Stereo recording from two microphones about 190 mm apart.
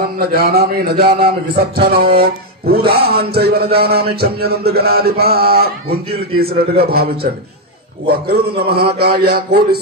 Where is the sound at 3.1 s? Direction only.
55° right (ahead or behind).